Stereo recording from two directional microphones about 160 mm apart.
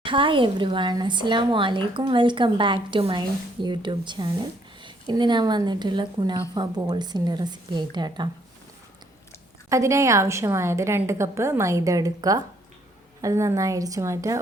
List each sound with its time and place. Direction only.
0.0 s speech: 30° right (ahead or behind)
9.6 s speech: 20° right (ahead or behind)